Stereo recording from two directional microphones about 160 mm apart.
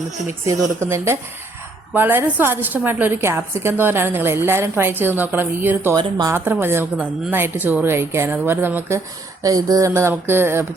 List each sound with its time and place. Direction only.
0.8 s a woman's voice: 15° right (ahead or behind)
6.0 s speech: 25° right (ahead or behind)
6.3 s a woman's voice: 15° right (ahead or behind)